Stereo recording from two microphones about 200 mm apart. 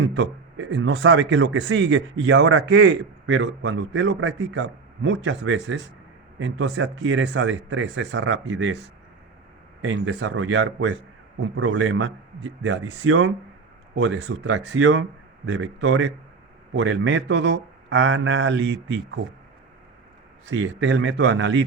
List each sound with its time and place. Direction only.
0.2 s speech: 65° right (ahead or behind)
9.8 s speech: 70° right (ahead or behind)
11.5 s a man's voice: 80° right; by 19.2 s 65° right (ahead or behind)
20.6 s speech: 65° right (ahead or behind)